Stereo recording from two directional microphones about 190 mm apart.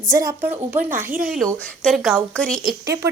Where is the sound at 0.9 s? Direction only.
45° right (ahead or behind).